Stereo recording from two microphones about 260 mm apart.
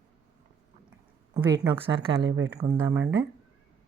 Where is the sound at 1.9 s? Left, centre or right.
Centre.